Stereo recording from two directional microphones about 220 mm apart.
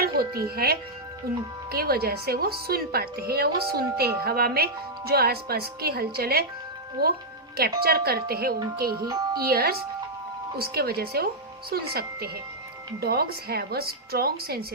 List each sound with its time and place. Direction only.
0.2 s music: 45° right (ahead or behind)
0.5 s a woman's voice: 45° right (ahead or behind)